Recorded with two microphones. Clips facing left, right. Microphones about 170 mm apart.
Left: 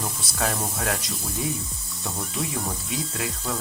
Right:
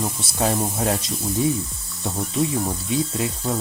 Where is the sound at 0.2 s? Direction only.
25° right (ahead or behind).